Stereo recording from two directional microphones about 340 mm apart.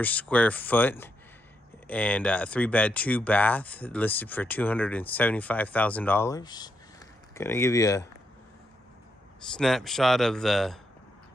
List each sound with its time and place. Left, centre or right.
0.0 s speech: centre
9.4 s speech: centre